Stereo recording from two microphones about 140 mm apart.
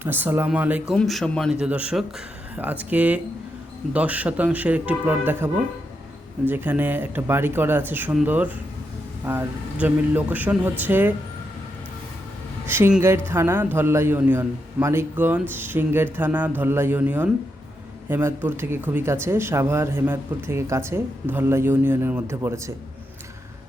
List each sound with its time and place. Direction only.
0.0 s speech: 15° right (ahead or behind)
0.9 s a man's voice: centre (ahead or behind)
1.5 s speech: 10° right (ahead or behind)
6.5 s speech: 15° right (ahead or behind)
12.6 s a woman's voice: 15° right (ahead or behind)